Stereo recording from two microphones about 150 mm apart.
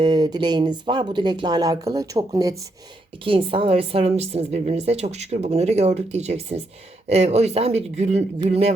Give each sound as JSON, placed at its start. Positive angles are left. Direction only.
{"t": 0.0, "sound": "speech", "side_deg": -25}
{"t": 3.2, "sound": "a woman's voice", "side_deg": -35}